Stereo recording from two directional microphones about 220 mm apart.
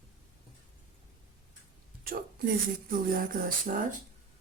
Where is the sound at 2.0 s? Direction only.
40° right (ahead or behind).